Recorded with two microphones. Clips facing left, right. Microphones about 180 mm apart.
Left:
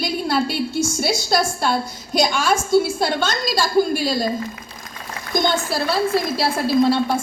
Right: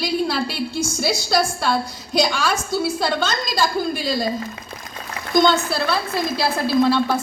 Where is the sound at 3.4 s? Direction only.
50° right (ahead or behind).